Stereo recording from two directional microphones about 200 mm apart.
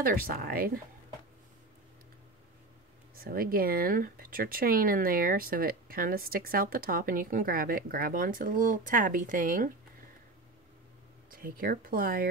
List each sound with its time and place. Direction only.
0.0 s speech: 45° right (ahead or behind)
3.2 s speech: 45° right (ahead or behind)
11.2 s speech: 45° right (ahead or behind)